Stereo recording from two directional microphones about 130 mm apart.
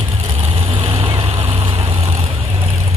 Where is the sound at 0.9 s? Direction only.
45° right (ahead or behind).